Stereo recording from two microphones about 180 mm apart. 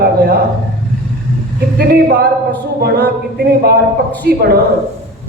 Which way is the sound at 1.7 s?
60° right (ahead or behind).